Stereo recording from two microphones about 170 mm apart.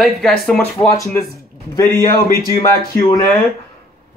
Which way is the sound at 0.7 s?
20° left (ahead or behind).